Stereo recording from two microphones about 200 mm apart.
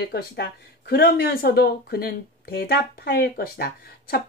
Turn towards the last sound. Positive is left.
turn(degrees=50)  # may be behind; listen again after turning